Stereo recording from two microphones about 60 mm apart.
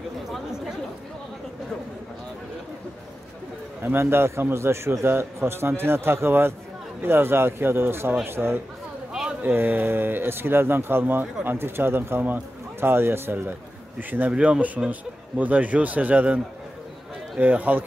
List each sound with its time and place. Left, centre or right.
3.8 s a man's voice: right
14.3 s speech: centre
14.9 s a man's voice: right
17.4 s a man's voice: right